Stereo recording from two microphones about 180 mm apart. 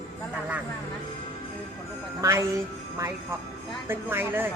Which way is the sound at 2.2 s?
15° right (ahead or behind).